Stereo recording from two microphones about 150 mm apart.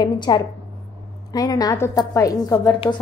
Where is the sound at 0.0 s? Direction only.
30° left (ahead or behind).